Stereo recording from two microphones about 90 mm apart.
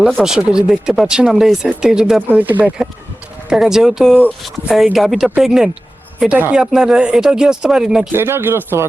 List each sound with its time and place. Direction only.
0.2 s speech: 10° right (ahead or behind)
2.4 s speech: 20° right (ahead or behind)
3.5 s speech: 5° right (ahead or behind)
8.1 s speech: 25° right (ahead or behind)